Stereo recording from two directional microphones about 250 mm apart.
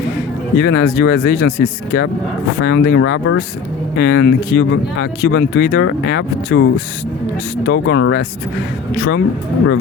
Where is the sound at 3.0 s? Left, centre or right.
Left.